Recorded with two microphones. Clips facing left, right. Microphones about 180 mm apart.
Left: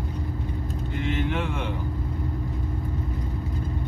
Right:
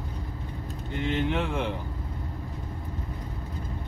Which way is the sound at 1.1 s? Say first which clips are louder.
Right 1 dB; 25° right (ahead or behind).